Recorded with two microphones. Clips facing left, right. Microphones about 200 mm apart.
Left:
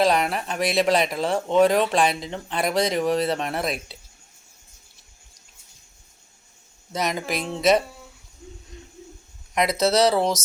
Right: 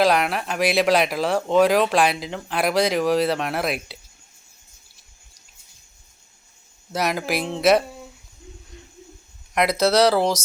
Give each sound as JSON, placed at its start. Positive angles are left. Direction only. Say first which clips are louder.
{"t": 0.0, "sound": "speech", "louder": "right 1 dB", "side_deg": 0}
{"t": 6.9, "sound": "speech", "louder": "right 2 dB", "side_deg": -5}
{"t": 9.6, "sound": "speech", "louder": "right 2 dB", "side_deg": 0}